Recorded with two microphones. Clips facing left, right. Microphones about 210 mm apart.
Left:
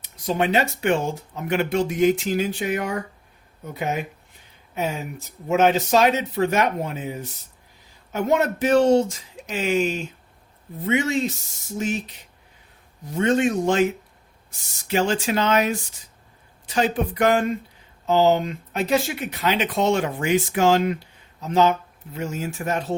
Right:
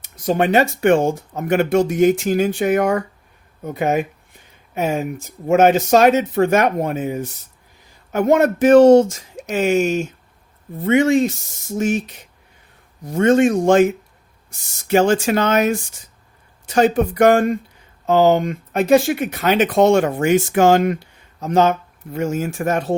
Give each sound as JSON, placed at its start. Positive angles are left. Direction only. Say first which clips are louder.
{"t": 0.3, "sound": "speech", "louder": "right 5 dB", "side_deg": -50}
{"t": 14.8, "sound": "speech", "louder": "right 7 dB", "side_deg": -50}